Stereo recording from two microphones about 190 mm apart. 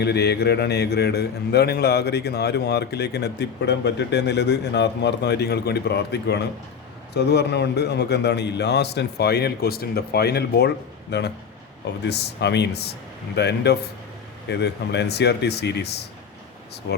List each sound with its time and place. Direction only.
0.0 s a man's voice: 60° left (ahead or behind)